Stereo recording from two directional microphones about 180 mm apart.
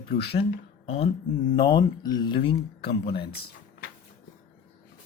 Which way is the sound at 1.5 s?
25° left (ahead or behind).